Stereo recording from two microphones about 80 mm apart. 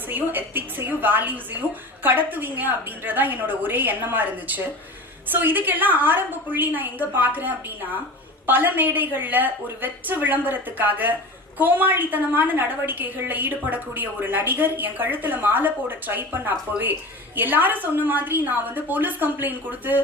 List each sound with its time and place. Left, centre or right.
0.1 s a woman's voice: right